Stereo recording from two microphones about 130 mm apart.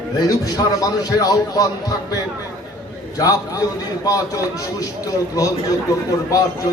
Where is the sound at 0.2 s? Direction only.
30° left (ahead or behind).